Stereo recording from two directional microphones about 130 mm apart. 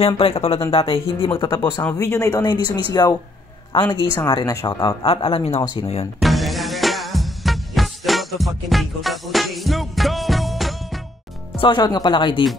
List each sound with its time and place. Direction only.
0.0 s speech: 50° left (ahead or behind)
1.5 s speech: 20° left (ahead or behind)
5.0 s speech: 45° left (ahead or behind)
6.2 s music: centre (ahead or behind)
11.5 s speech: 40° left (ahead or behind)